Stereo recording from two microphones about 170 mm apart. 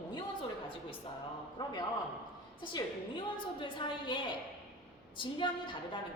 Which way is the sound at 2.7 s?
30° left (ahead or behind).